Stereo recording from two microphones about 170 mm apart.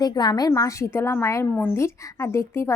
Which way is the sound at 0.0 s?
25° left (ahead or behind).